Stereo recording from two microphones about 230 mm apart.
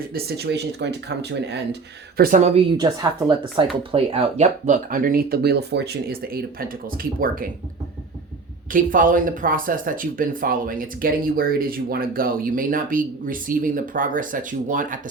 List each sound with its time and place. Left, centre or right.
0.1 s speech: right
2.1 s speech: right
8.7 s speech: right